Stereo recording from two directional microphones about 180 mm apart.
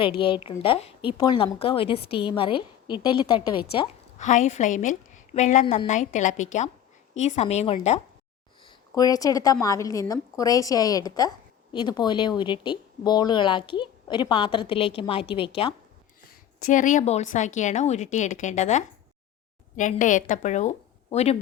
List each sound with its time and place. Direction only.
0.2 s a woman's voice: 25° left (ahead or behind)
4.2 s a woman's voice: 40° left (ahead or behind)
8.6 s a woman's voice: 20° left (ahead or behind)
16.6 s a woman's voice: 45° left (ahead or behind)